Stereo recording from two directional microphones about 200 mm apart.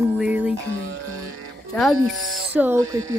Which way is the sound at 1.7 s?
Centre (ahead or behind).